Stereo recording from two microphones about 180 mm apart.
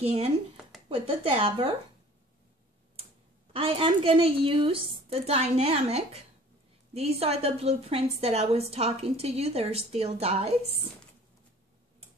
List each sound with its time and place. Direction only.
0.0 s a woman's voice: 35° right (ahead or behind)
3.5 s a woman's voice: 30° right (ahead or behind)